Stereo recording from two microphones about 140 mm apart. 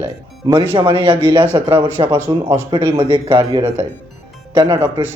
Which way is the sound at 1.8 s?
40° right (ahead or behind).